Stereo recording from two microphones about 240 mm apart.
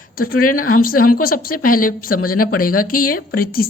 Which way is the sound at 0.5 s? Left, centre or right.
Left.